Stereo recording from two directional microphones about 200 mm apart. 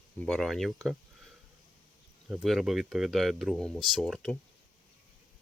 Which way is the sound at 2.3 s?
Centre (ahead or behind).